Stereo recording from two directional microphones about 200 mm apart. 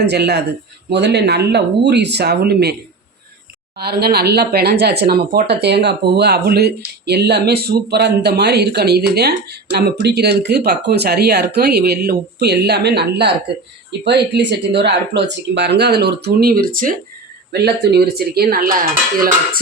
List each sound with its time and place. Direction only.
0.0 s speech: 55° right (ahead or behind)
3.8 s speech: 50° right (ahead or behind)
18.0 s speech: 50° right (ahead or behind)